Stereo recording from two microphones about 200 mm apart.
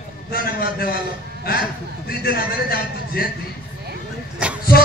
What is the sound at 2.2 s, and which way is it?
A man's voice, 50° left (ahead or behind).